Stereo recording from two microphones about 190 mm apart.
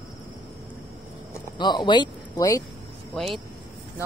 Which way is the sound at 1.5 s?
25° left (ahead or behind).